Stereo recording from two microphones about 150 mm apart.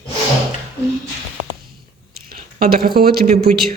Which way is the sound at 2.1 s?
80° right.